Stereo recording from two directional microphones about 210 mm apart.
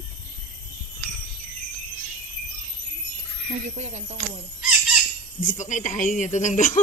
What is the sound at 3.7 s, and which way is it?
Speech, 30° right (ahead or behind).